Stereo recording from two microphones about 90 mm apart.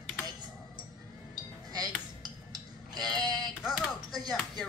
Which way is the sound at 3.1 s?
50° right (ahead or behind).